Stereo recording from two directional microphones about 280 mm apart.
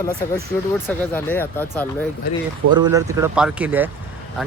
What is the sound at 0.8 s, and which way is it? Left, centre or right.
Speech, centre.